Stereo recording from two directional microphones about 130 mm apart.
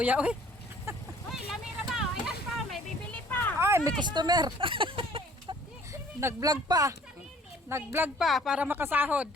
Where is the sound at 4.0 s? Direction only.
35° right (ahead or behind).